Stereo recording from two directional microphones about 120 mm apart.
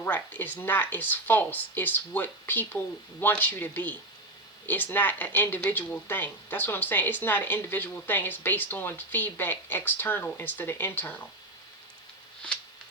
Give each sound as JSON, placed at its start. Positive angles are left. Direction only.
{"t": 0.0, "sound": "speech", "side_deg": 15}